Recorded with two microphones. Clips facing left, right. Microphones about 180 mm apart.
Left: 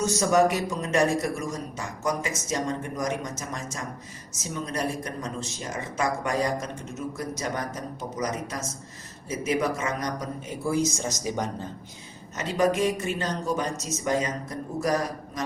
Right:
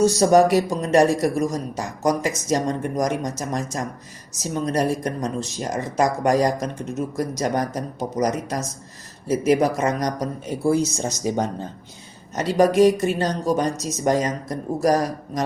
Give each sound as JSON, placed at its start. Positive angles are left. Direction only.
{"t": 0.0, "sound": "speech", "side_deg": -35}